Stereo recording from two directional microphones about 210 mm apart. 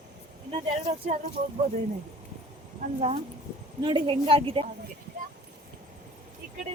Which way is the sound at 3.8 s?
25° right (ahead or behind).